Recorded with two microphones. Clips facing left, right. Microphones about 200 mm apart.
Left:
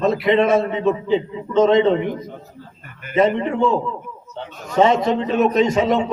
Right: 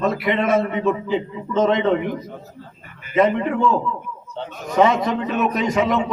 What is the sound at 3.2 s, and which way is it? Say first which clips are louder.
Speech: left 1 dB; 25° left (ahead or behind).